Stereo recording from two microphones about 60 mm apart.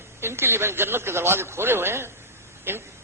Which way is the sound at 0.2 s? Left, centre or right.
Right.